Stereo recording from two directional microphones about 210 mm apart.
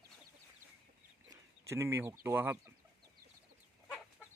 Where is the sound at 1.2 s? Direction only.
15° right (ahead or behind).